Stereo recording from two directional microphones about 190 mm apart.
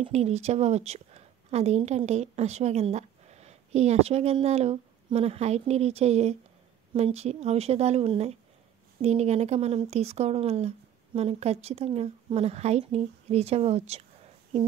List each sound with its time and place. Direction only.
0.0 s a woman's voice: 35° right (ahead or behind)